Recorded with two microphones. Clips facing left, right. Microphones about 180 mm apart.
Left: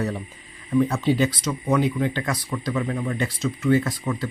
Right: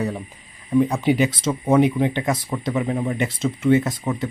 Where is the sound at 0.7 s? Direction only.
15° right (ahead or behind).